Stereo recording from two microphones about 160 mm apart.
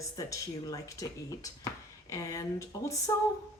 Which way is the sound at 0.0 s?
20° left (ahead or behind).